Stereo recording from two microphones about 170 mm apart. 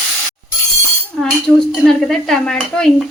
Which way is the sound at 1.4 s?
5° left (ahead or behind).